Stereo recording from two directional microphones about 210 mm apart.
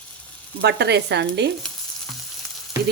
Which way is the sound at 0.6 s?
55° right (ahead or behind).